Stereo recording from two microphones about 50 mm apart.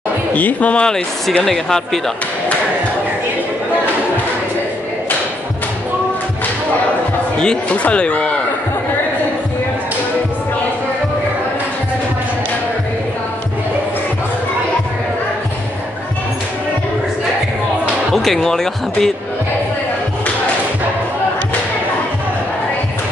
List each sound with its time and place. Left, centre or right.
0.3 s speech: left
0.8 s speech: centre
7.7 s speech: left
18.1 s speech: centre